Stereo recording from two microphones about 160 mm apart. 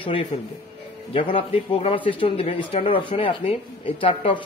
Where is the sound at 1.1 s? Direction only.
35° left (ahead or behind).